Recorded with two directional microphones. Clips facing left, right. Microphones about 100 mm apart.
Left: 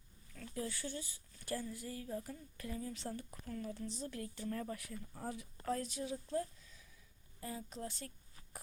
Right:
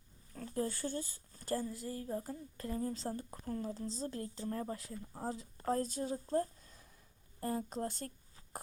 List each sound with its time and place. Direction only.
0.3 s a woman's voice: 35° right (ahead or behind)